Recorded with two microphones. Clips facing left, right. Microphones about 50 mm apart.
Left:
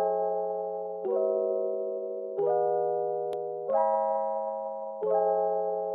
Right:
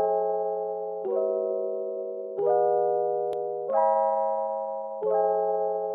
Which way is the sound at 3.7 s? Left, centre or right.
Right.